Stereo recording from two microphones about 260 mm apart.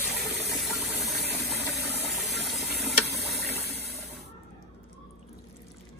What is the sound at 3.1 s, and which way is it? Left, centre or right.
Water, right.